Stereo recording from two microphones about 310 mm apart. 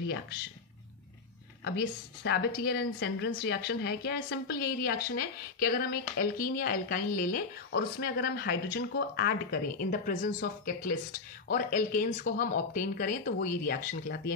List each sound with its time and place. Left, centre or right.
1.6 s a woman's voice: left